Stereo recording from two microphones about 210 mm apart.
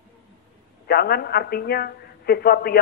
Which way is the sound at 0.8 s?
45° left (ahead or behind).